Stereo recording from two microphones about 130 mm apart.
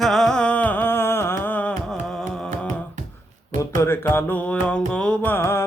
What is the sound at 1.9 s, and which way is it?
Music, centre (ahead or behind).